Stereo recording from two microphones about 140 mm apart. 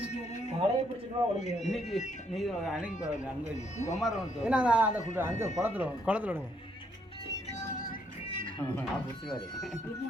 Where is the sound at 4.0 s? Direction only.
5° right (ahead or behind).